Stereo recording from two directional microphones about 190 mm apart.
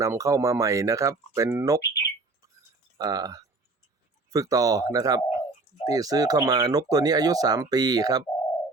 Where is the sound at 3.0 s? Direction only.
20° right (ahead or behind).